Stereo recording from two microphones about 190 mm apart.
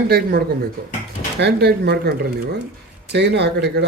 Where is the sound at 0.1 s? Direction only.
55° right (ahead or behind).